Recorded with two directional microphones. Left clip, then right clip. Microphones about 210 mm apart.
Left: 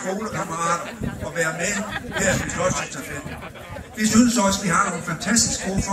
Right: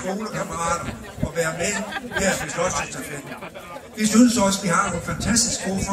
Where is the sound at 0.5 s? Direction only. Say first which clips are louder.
Left 2 dB; 55° right (ahead or behind).